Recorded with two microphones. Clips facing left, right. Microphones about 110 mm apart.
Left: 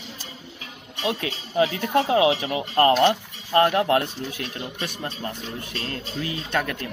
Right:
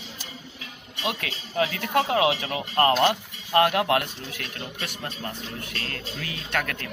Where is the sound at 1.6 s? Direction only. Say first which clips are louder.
Left 3 dB; 25° left (ahead or behind).